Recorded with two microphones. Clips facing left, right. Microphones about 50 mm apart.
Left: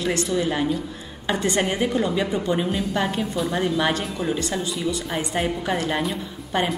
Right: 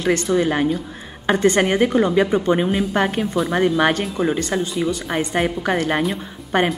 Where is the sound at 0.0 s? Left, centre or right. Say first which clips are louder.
Right 5 dB; right.